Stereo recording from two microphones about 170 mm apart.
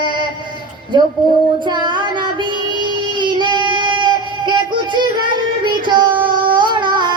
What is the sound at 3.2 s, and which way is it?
Child singing, 25° right (ahead or behind).